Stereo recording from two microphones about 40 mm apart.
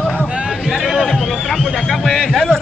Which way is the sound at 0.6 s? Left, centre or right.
Centre.